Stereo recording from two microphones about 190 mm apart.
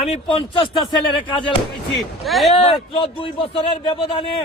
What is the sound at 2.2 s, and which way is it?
Speech, centre (ahead or behind).